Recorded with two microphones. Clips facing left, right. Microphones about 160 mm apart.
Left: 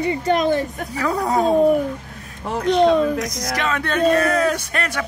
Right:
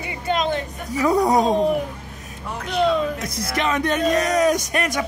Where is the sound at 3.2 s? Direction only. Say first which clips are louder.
Left 1 dB; 30° right (ahead or behind); by 5.0 s 15° right (ahead or behind).